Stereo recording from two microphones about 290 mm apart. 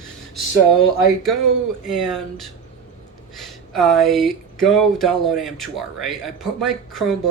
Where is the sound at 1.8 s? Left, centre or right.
Centre.